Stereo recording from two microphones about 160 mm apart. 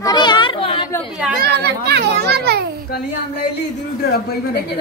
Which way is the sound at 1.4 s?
90° right.